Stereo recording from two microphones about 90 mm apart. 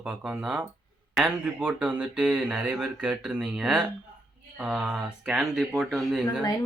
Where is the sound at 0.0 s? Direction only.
10° right (ahead or behind).